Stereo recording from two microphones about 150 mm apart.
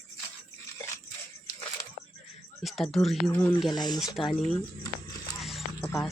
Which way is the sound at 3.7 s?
30° left (ahead or behind).